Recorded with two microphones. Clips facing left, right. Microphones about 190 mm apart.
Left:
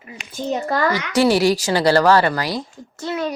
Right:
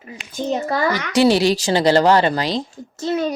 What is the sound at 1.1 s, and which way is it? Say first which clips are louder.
Speech: right 1 dB; 20° right (ahead or behind).